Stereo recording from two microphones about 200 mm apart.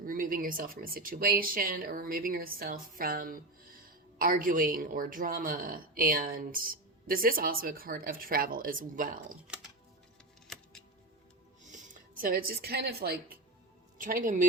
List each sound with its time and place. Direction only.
0.0 s a woman's voice: 45° right (ahead or behind)
10.5 s music: centre (ahead or behind)
11.6 s a woman's voice: 40° right (ahead or behind)